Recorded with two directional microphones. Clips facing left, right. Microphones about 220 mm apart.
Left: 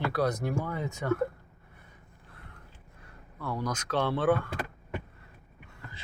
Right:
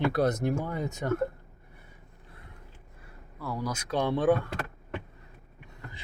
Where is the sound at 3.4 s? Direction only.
5° right (ahead or behind).